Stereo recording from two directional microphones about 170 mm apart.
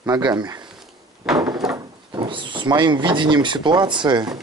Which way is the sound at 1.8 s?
30° right (ahead or behind).